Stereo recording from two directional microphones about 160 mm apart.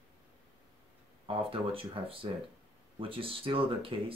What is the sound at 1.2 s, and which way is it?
Speech, 35° right (ahead or behind).